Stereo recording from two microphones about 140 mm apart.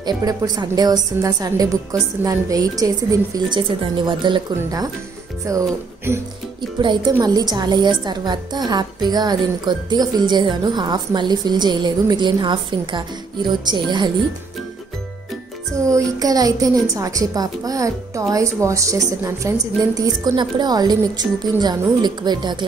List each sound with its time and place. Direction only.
0.0 s a woman's voice: 25° right (ahead or behind)
15.8 s speech: 20° right (ahead or behind)